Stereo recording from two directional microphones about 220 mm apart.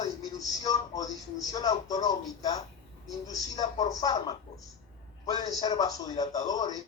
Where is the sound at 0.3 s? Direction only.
15° left (ahead or behind).